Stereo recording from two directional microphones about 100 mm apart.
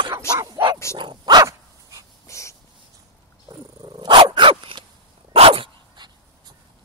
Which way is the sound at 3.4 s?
40° right (ahead or behind).